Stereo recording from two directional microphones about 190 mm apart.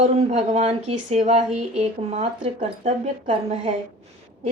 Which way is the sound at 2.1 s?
35° right (ahead or behind).